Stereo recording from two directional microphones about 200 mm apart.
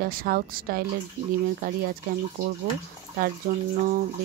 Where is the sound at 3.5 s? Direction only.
40° right (ahead or behind).